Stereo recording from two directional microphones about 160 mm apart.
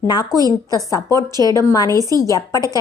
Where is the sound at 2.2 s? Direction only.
20° left (ahead or behind).